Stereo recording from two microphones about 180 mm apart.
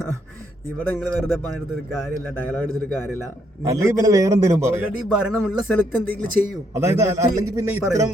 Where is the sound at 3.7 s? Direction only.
20° right (ahead or behind).